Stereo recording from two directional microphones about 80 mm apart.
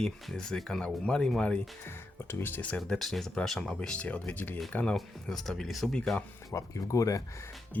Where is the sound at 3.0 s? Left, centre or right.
Centre.